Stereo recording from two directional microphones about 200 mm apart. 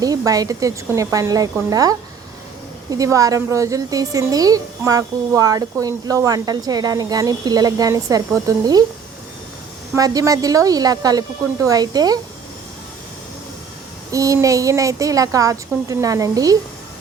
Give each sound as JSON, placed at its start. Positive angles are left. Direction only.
{"t": 0.0, "sound": "speech", "side_deg": -20}
{"t": 9.9, "sound": "speech", "side_deg": -15}
{"t": 14.1, "sound": "speech", "side_deg": -15}